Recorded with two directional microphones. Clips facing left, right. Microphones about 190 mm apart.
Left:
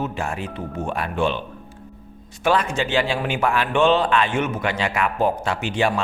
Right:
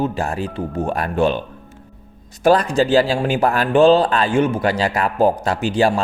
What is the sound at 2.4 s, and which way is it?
A man's voice, 40° right (ahead or behind).